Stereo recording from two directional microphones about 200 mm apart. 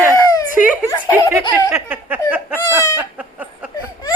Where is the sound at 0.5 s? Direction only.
10° right (ahead or behind).